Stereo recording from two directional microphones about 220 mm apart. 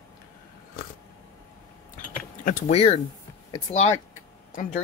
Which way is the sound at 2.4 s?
30° left (ahead or behind).